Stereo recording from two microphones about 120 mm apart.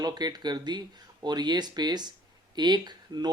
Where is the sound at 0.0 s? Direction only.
35° right (ahead or behind).